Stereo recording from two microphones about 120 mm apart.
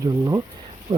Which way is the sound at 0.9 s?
50° right (ahead or behind).